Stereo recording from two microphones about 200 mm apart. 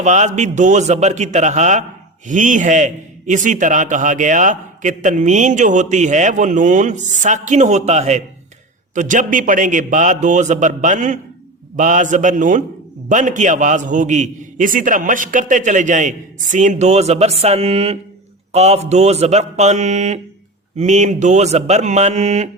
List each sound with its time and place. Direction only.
0.0 s a man's voice: 35° right (ahead or behind)